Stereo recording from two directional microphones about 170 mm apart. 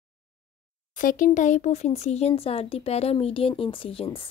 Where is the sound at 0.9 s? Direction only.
50° left (ahead or behind).